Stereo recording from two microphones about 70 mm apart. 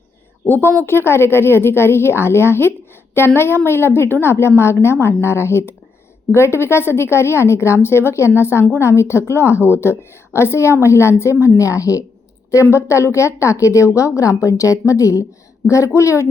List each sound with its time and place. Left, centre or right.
0.4 s a woman's voice: left